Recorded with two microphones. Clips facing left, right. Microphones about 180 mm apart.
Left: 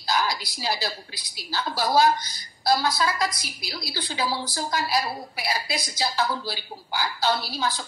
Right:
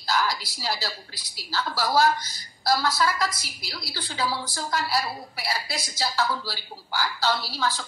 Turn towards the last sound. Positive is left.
turn(degrees=15)  # may be behind; listen again after turning